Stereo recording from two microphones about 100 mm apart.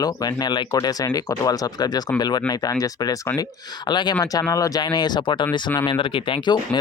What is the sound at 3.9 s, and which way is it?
Speech, 45° left (ahead or behind).